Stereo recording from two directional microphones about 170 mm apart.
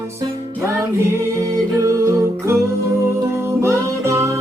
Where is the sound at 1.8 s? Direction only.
15° right (ahead or behind).